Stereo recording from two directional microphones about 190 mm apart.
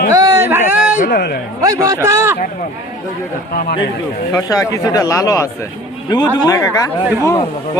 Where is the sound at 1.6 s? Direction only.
20° right (ahead or behind).